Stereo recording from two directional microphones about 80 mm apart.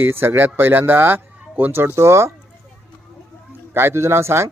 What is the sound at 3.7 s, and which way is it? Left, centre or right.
Speech, right.